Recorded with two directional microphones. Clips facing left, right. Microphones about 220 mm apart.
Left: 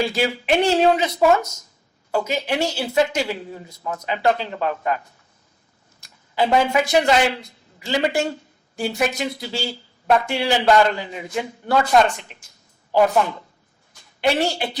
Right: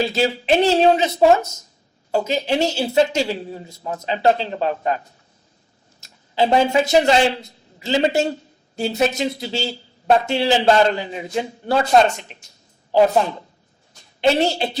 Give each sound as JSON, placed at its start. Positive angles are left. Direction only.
{"t": 0.0, "sound": "a man's voice", "side_deg": -25}